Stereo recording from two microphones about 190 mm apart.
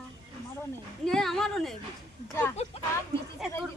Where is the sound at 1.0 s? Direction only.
Centre (ahead or behind).